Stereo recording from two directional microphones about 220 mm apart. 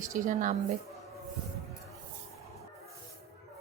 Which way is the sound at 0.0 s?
35° right (ahead or behind).